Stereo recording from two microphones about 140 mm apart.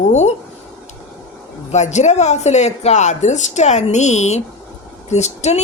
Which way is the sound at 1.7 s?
55° left (ahead or behind).